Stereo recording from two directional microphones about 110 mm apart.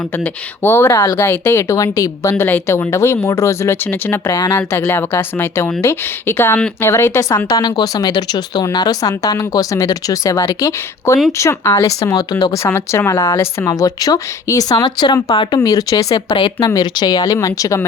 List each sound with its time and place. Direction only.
0.2 s speech: 20° left (ahead or behind)
4.3 s speech: 30° left (ahead or behind)
7.5 s speech: 40° left (ahead or behind)
12.6 s speech: 20° left (ahead or behind)